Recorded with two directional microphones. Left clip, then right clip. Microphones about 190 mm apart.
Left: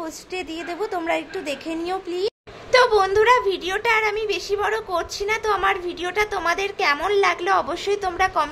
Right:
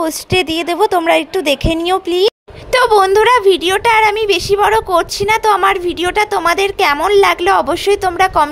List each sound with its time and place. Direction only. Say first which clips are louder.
0.0 s a woman's voice: right 15 dB; 50° right (ahead or behind)